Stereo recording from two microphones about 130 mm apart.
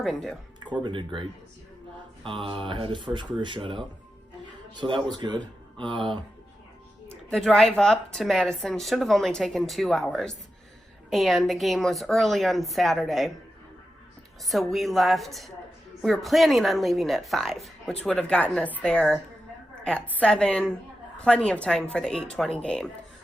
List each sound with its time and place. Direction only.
0.0 s speech: 5° left (ahead or behind)
0.9 s speech: 40° right (ahead or behind)
7.1 s speech: 5° left (ahead or behind)
14.4 s a woman's voice: centre (ahead or behind)